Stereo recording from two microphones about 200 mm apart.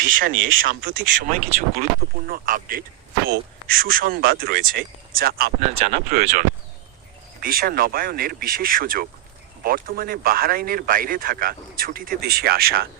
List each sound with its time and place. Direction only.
0.1 s speech: 45° right (ahead or behind)
7.4 s speech: 45° right (ahead or behind)